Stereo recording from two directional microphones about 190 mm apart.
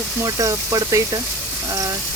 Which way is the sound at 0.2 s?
15° right (ahead or behind).